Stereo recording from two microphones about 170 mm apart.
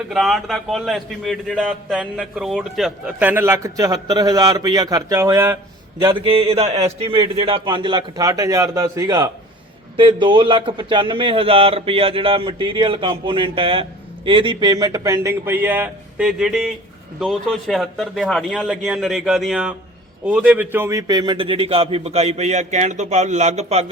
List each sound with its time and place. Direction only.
0.1 s a man's voice: centre (ahead or behind)
6.1 s a man's voice: 35° right (ahead or behind); by 21.0 s 15° right (ahead or behind)
21.1 s speech: 25° right (ahead or behind)